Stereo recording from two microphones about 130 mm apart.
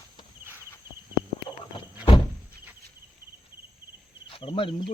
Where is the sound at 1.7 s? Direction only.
35° left (ahead or behind).